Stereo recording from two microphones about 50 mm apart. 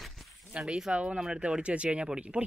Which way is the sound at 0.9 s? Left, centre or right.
Centre.